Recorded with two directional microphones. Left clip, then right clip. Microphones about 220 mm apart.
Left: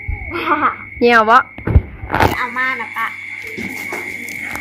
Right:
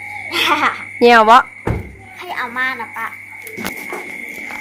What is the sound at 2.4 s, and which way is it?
Speech, 25° right (ahead or behind).